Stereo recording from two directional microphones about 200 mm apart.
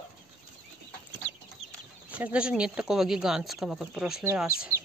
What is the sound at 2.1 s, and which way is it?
Speech, 5° right (ahead or behind).